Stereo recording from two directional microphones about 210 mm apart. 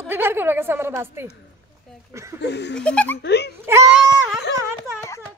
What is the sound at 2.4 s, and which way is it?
Speech, 55° left (ahead or behind).